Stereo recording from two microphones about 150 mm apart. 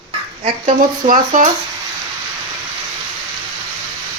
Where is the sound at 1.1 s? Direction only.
55° right (ahead or behind).